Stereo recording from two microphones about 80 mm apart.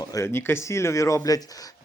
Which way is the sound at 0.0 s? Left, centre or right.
Left.